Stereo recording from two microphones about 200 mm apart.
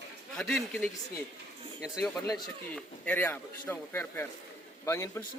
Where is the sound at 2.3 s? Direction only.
5° left (ahead or behind).